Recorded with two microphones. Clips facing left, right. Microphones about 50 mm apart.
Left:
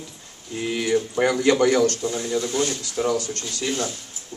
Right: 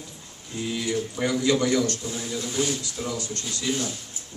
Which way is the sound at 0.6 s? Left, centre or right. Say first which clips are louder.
Left 4 dB; left.